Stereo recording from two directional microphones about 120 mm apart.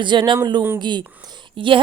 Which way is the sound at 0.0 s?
40° right (ahead or behind).